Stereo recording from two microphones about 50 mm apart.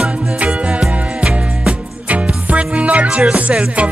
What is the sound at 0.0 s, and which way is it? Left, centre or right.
Music, right.